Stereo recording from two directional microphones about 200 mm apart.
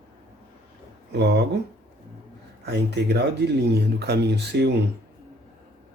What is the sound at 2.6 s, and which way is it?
Speech, 55° right (ahead or behind).